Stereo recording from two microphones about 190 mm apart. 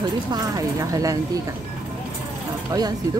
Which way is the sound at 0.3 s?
20° right (ahead or behind).